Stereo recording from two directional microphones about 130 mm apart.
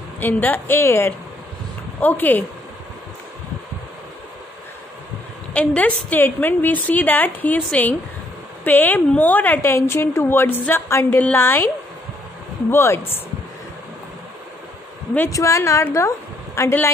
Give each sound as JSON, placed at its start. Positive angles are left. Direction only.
{"t": 0.2, "sound": "a woman's voice", "side_deg": 15}
{"t": 5.5, "sound": "a woman's voice", "side_deg": 10}
{"t": 12.7, "sound": "a woman's voice", "side_deg": 20}
{"t": 15.1, "sound": "a woman's voice", "side_deg": 20}